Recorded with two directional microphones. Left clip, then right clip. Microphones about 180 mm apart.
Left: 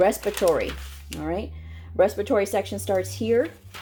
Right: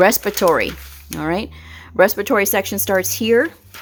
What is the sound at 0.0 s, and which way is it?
Speech, 35° right (ahead or behind).